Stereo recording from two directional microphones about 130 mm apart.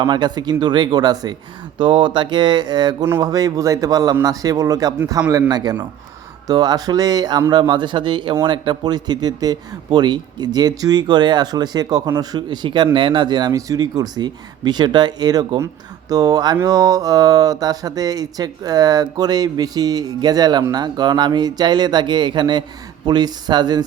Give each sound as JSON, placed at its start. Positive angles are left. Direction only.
{"t": 0.0, "sound": "speech", "side_deg": -35}